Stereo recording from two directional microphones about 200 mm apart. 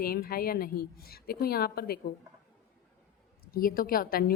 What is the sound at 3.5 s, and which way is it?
Speech, 45° left (ahead or behind).